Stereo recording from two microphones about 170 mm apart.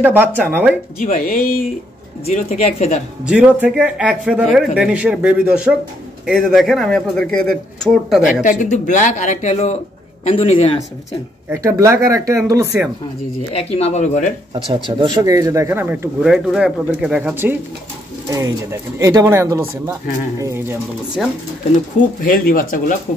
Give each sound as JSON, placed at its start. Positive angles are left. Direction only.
{"t": 0.0, "sound": "speech", "side_deg": -10}
{"t": 0.9, "sound": "speech", "side_deg": 55}
{"t": 2.2, "sound": "speech", "side_deg": 40}
{"t": 3.3, "sound": "a man's voice", "side_deg": -10}
{"t": 8.3, "sound": "speech", "side_deg": 50}
{"t": 11.5, "sound": "speech", "side_deg": -15}
{"t": 13.5, "sound": "speech", "side_deg": 35}
{"t": 14.5, "sound": "speech", "side_deg": -30}
{"t": 21.2, "sound": "a man's voice", "side_deg": 0}
{"t": 21.7, "sound": "speech", "side_deg": 55}